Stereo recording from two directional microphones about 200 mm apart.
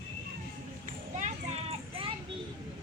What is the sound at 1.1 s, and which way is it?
Children playing, 35° right (ahead or behind).